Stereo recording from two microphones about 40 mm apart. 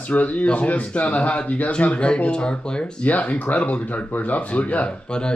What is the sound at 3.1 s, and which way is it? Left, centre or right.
Speech, left.